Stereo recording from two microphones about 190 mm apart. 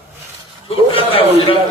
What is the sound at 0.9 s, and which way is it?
Mantra, 30° left (ahead or behind).